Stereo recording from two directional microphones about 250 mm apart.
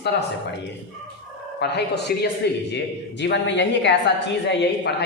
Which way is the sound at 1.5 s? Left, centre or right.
Left.